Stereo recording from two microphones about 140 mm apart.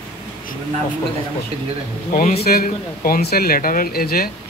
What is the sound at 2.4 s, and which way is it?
Speech, 90° left.